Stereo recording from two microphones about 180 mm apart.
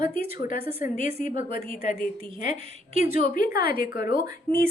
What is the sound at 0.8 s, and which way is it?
Speech, 45° left (ahead or behind).